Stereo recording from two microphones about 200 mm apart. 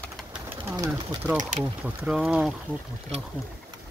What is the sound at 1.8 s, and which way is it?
Speech, 5° right (ahead or behind).